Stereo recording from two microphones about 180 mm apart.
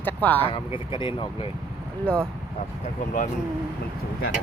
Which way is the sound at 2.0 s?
5° left (ahead or behind).